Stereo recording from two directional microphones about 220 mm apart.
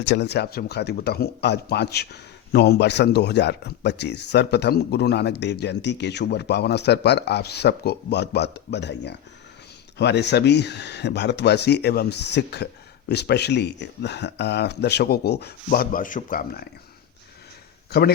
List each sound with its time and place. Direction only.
0.0 s speech: 50° left (ahead or behind)